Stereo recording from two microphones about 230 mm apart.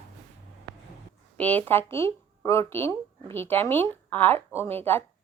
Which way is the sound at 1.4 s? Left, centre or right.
Centre.